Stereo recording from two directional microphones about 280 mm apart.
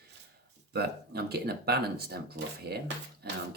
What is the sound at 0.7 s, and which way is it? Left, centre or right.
Speech, right.